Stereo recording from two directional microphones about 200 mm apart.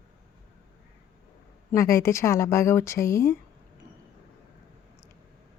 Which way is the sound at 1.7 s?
15° left (ahead or behind).